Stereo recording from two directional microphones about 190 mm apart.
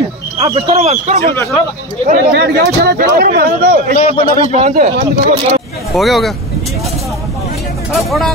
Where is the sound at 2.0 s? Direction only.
55° right (ahead or behind).